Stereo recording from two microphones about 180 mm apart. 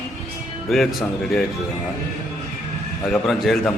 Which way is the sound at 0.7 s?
Centre (ahead or behind).